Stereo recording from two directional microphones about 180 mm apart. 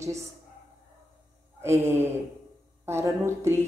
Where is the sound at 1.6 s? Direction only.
15° right (ahead or behind).